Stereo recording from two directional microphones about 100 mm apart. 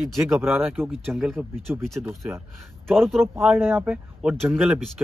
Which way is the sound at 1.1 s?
Centre (ahead or behind).